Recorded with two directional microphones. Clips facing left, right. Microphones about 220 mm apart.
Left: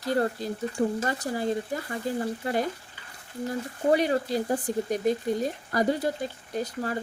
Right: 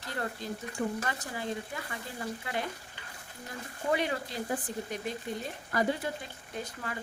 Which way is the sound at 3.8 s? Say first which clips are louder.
Left 8 dB; 40° left (ahead or behind).